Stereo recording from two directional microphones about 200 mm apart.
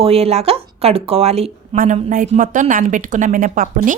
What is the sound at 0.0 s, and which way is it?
Speech, 30° right (ahead or behind).